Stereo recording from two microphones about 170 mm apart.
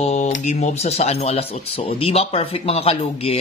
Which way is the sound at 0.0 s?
40° left (ahead or behind).